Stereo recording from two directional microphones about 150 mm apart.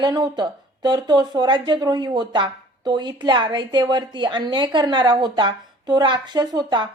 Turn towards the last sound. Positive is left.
turn(degrees=-30)  # may be behind; listen again after turning